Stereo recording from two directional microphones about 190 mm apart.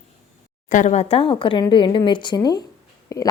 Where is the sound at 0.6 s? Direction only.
40° left (ahead or behind).